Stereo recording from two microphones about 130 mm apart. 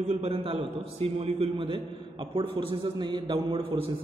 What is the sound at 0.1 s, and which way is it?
A man's voice, 45° right (ahead or behind).